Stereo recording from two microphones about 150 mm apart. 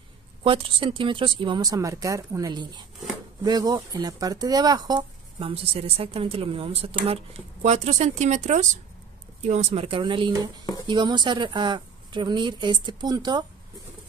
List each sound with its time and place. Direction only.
0.4 s speech: 35° right (ahead or behind)